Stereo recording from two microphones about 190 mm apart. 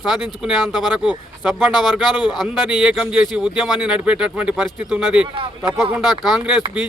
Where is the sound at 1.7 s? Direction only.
20° left (ahead or behind).